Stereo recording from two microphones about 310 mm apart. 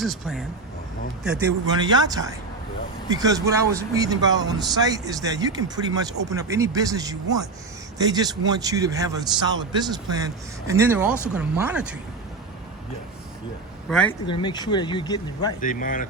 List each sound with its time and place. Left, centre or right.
0.0 s a man's voice: centre
14.3 s speech: centre
15.6 s speech: left